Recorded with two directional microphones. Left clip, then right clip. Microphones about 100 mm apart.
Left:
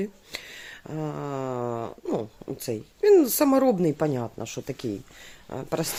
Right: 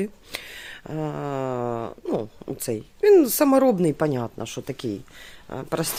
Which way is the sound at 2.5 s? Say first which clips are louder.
Right 3 dB; 30° right (ahead or behind).